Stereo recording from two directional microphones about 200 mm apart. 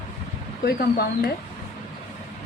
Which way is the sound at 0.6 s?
50° left (ahead or behind).